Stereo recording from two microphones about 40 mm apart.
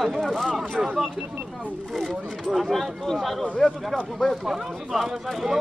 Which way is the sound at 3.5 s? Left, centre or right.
Centre.